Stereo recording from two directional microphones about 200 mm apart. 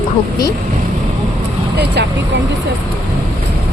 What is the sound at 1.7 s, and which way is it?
Speech, 55° right (ahead or behind).